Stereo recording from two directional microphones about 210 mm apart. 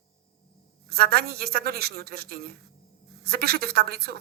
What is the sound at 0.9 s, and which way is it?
Speech, 45° right (ahead or behind).